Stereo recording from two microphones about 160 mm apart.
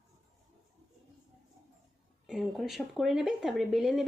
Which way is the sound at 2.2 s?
Centre (ahead or behind).